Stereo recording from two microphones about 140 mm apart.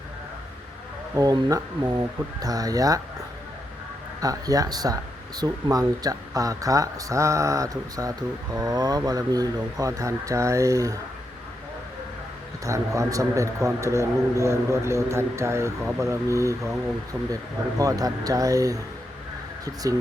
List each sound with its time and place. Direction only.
1.1 s a man's voice: 25° right (ahead or behind)
4.2 s a man's voice: 25° right (ahead or behind)
12.6 s a man's voice: 20° right (ahead or behind)
17.7 s a man's voice: 25° right (ahead or behind)